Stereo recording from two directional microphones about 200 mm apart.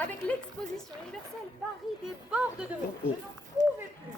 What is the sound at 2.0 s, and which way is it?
Speech, 5° right (ahead or behind).